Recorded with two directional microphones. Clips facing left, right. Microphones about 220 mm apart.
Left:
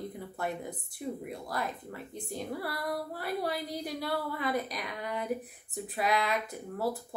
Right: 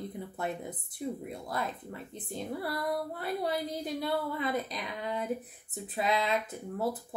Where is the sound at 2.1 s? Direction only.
20° right (ahead or behind).